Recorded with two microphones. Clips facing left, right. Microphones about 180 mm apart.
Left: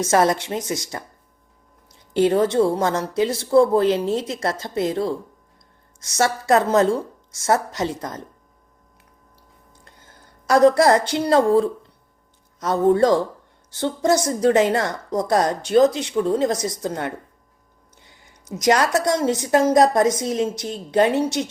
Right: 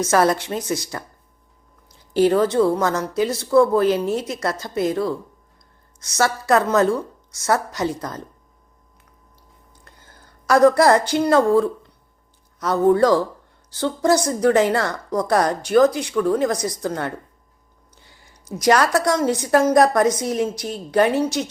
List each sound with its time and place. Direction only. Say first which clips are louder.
0.0 s a woman's voice: even; 25° left (ahead or behind)
9.8 s a woman's voice: even; 20° left (ahead or behind)